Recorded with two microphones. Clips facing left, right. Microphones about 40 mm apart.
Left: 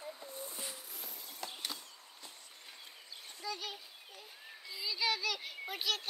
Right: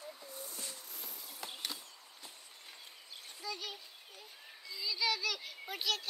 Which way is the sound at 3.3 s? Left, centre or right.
Centre.